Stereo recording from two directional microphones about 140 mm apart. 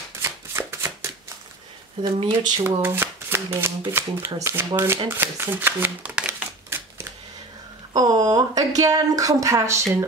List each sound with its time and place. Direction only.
0.2 s shuffling cards: 15° right (ahead or behind)
2.1 s speech: 35° right (ahead or behind)
2.8 s shuffling cards: 15° right (ahead or behind)
3.9 s speech: 20° right (ahead or behind)
5.1 s shuffling cards: 15° right (ahead or behind)
7.9 s speech: 25° right (ahead or behind)